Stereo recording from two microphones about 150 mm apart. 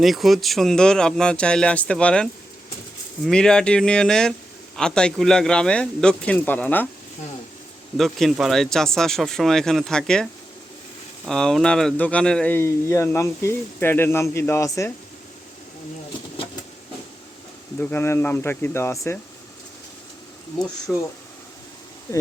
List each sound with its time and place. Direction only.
0.0 s speech: centre (ahead or behind)
7.9 s speech: centre (ahead or behind)
11.3 s speech: 5° left (ahead or behind)
17.7 s speech: 15° left (ahead or behind)
20.9 s speech: centre (ahead or behind)
22.1 s speech: 20° left (ahead or behind)